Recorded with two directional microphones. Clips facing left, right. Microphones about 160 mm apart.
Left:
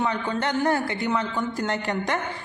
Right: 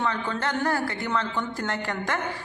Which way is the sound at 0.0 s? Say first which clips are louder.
Left 2 dB; 15° left (ahead or behind).